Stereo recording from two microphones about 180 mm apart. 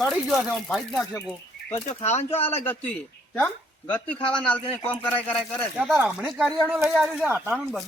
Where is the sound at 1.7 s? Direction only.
35° left (ahead or behind).